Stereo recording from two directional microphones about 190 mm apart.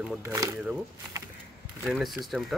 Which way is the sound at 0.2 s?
20° right (ahead or behind).